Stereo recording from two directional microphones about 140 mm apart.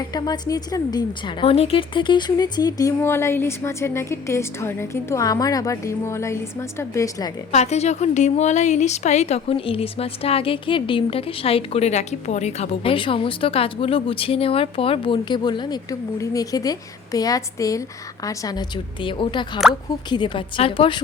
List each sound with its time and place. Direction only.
0.0 s a woman's voice: 30° left (ahead or behind)
7.5 s a woman's voice: 50° left (ahead or behind); by 18.6 s 25° left (ahead or behind)
19.0 s a woman's voice: 35° left (ahead or behind)